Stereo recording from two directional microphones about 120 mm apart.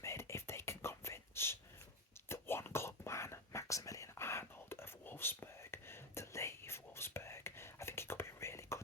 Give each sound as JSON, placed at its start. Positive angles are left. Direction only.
{"t": 0.0, "sound": "whispering", "side_deg": 25}